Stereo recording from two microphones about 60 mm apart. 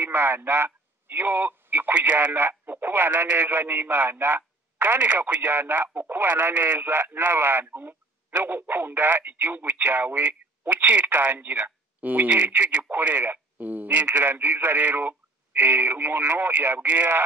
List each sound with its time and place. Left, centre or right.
0.0 s speech: right
12.9 s speech: right